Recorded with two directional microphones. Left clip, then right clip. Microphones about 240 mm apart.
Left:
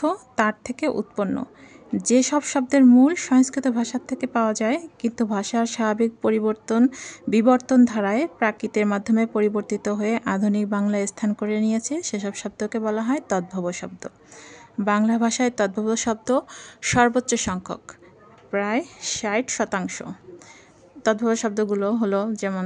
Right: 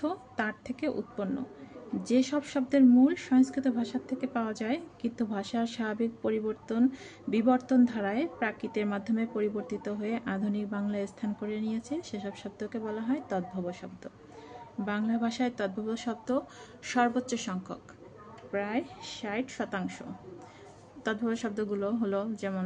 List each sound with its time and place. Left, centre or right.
0.0 s speech: left